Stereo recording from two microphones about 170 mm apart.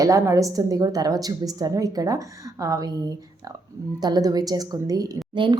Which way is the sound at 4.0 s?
20° right (ahead or behind).